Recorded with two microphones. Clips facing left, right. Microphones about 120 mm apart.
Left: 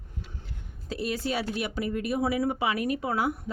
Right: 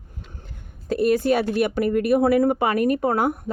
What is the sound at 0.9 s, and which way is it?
Speech, 55° right (ahead or behind).